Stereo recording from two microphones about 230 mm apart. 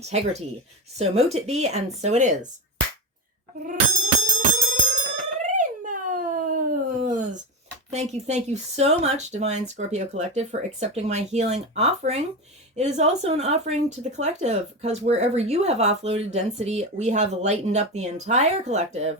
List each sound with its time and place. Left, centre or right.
0.9 s speech: right
3.6 s bicycle bell: right
5.5 s dog: right
7.9 s speech: right